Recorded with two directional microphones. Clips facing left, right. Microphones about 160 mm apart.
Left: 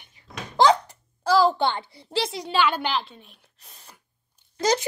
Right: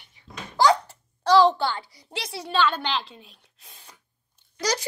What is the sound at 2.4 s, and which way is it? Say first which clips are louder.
Speech: right 1 dB; 10° left (ahead or behind).